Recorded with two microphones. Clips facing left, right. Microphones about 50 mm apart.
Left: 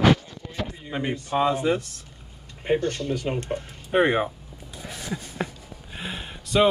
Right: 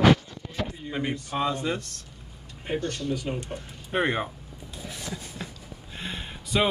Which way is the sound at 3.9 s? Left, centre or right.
Centre.